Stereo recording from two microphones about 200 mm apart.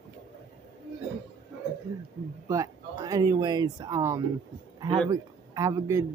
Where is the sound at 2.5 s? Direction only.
15° right (ahead or behind).